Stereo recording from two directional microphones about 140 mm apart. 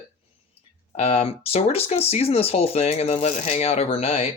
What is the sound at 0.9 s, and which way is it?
Speech, 45° left (ahead or behind).